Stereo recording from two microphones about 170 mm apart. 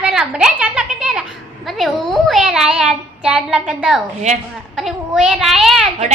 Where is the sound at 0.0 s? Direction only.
5° right (ahead or behind).